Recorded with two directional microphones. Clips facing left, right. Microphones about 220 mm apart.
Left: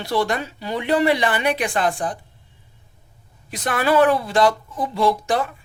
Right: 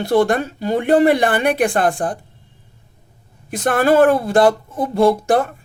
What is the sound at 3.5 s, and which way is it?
Speech, 50° right (ahead or behind).